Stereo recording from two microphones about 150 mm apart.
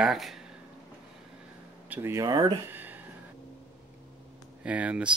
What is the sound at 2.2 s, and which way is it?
Speech, 30° right (ahead or behind).